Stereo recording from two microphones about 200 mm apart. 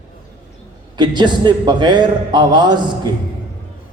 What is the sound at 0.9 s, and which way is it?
A man's voice, 20° right (ahead or behind).